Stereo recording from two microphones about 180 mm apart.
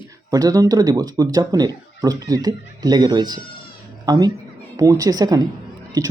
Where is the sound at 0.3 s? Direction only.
20° right (ahead or behind).